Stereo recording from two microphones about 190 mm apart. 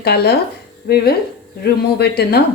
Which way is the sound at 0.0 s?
55° left (ahead or behind).